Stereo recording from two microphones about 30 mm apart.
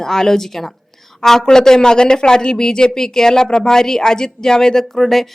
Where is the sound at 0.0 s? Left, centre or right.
Centre.